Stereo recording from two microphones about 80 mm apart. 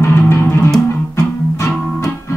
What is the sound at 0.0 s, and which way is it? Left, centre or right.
Music, left.